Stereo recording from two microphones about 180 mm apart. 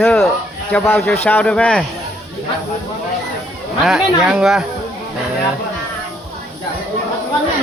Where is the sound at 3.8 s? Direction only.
5° right (ahead or behind).